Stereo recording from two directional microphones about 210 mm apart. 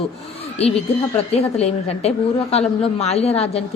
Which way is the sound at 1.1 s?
30° left (ahead or behind).